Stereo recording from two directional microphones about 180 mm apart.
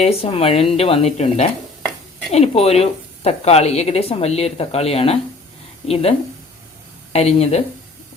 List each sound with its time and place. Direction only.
0.0 s speech: 35° left (ahead or behind)